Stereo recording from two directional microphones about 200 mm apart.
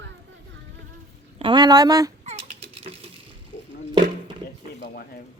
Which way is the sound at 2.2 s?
35° right (ahead or behind).